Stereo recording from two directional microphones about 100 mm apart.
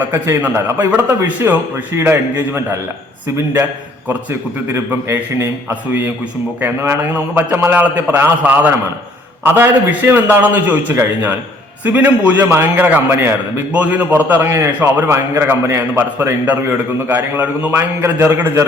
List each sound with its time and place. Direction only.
0.0 s a man's voice: 20° right (ahead or behind)
3.3 s a man's voice: 20° right (ahead or behind)
4.7 s a man's voice: 25° right (ahead or behind)
6.6 s a man's voice: 20° right (ahead or behind)